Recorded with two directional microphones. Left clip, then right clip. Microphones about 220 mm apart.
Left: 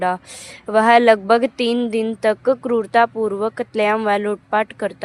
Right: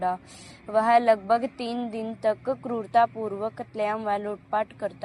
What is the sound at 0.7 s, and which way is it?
A woman's voice, 45° left (ahead or behind).